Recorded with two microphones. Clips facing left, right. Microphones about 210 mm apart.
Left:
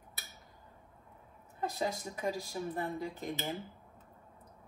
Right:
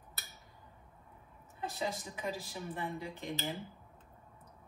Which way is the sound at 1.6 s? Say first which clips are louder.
Left 3 dB; 45° left (ahead or behind).